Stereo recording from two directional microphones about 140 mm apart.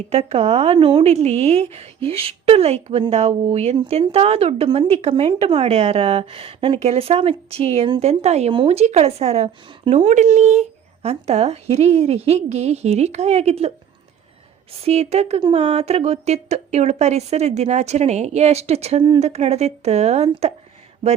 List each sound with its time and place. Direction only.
0.1 s speech: 50° right (ahead or behind)
10.1 s speech: 55° right (ahead or behind)
15.4 s speech: 35° right (ahead or behind)
15.6 s speech: 50° right (ahead or behind)